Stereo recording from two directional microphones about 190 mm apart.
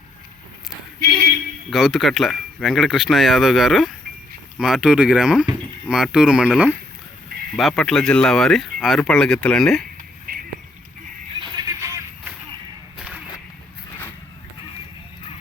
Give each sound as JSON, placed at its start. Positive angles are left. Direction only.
{"t": 1.0, "sound": "vehicle", "side_deg": -55}
{"t": 1.7, "sound": "speech", "side_deg": 0}
{"t": 10.3, "sound": "a sound", "side_deg": -50}
{"t": 11.3, "sound": "music", "side_deg": -25}
{"t": 13.0, "sound": "whip", "side_deg": -5}